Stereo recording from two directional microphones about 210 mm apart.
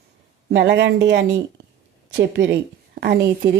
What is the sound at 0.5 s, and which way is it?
A woman's voice, 55° right (ahead or behind).